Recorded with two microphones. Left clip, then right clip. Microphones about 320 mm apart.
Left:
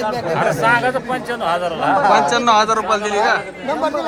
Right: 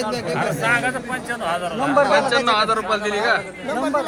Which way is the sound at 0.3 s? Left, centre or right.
Left.